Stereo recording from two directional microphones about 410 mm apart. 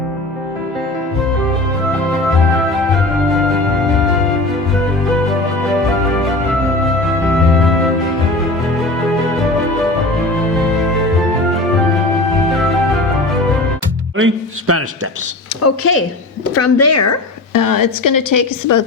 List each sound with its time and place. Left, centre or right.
14.2 s speech: right
15.6 s a woman's voice: left